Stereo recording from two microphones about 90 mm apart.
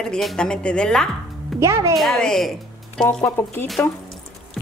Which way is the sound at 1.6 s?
35° right (ahead or behind).